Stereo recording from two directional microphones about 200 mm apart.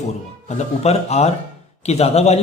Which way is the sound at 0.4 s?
30° left (ahead or behind).